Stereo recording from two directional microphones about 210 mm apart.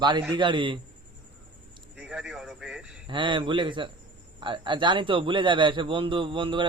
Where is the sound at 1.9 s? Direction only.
5° right (ahead or behind).